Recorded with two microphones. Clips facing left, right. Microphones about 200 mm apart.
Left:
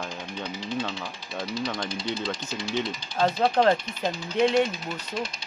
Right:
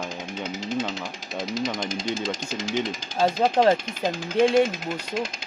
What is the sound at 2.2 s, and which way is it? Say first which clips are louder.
Speech: right 2 dB; 90° right.